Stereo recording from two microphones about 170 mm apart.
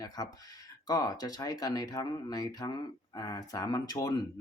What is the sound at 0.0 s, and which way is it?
Speech, 20° left (ahead or behind).